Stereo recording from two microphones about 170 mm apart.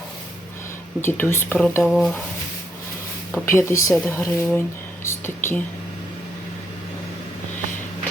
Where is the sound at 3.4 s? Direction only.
15° left (ahead or behind).